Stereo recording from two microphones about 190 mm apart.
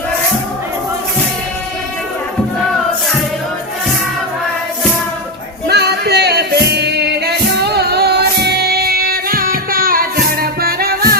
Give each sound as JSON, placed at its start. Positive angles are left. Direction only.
{"t": 5.6, "sound": "music", "side_deg": -60}